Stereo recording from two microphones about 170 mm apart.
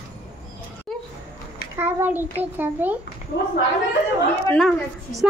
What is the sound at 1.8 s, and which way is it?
A child's voice, 15° right (ahead or behind).